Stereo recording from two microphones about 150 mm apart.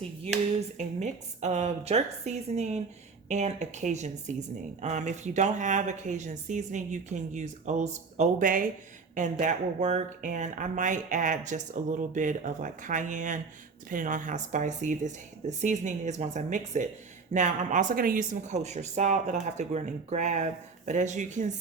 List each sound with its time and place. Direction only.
0.9 s speech: 50° right (ahead or behind)